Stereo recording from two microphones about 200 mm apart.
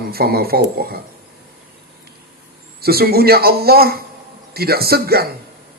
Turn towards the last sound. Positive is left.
turn(degrees=-50)  # may be behind; listen again after turning